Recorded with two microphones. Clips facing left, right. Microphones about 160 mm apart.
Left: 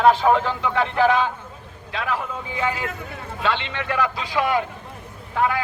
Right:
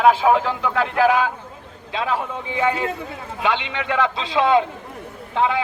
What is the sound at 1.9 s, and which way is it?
A man's voice, 25° right (ahead or behind).